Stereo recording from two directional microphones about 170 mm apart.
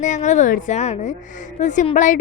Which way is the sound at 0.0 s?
45° left (ahead or behind).